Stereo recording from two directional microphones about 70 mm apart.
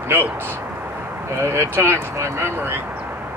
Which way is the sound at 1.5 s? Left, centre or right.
Right.